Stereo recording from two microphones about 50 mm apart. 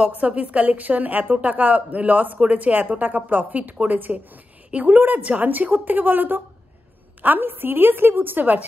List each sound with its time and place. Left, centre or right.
0.1 s a woman's voice: right